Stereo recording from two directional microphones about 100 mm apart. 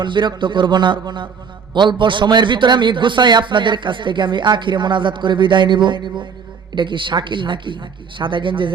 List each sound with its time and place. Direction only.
0.0 s a man's voice: 50° right (ahead or behind)